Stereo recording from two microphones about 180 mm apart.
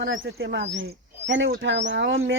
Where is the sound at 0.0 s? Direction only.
75° right (ahead or behind).